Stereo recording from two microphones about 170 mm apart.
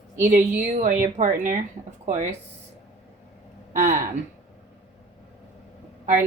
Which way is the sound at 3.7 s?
45° right (ahead or behind).